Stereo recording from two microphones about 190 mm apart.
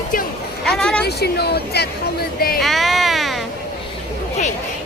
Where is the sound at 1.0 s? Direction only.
60° left (ahead or behind).